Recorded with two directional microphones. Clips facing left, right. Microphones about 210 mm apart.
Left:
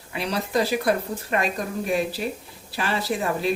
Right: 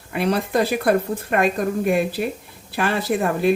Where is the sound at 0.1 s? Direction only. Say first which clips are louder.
Right 5 dB; 55° right (ahead or behind).